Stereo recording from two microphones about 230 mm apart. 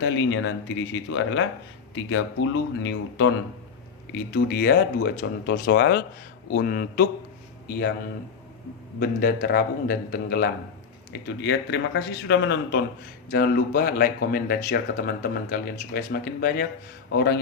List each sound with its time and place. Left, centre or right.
0.0 s speech: left
4.1 s speech: left
9.0 s speech: left